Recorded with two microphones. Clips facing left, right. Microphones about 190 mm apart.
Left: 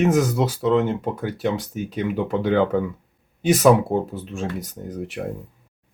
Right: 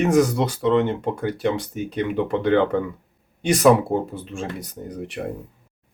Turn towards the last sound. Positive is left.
turn(degrees=0)  # may be behind; listen again after turning